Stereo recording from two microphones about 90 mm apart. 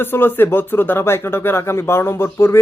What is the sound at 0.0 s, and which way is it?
Speech, 25° left (ahead or behind).